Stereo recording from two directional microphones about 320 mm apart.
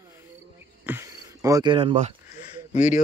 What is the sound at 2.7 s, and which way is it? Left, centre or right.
Speech, left.